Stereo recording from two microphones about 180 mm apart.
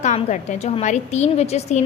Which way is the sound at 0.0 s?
40° left (ahead or behind).